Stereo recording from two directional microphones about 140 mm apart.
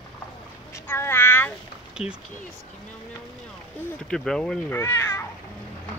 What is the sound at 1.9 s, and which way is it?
Speech, 5° right (ahead or behind).